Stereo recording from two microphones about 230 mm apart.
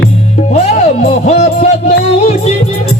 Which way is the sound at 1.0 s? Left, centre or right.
Left.